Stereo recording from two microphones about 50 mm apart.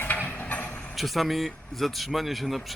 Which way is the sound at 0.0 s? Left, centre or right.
Left.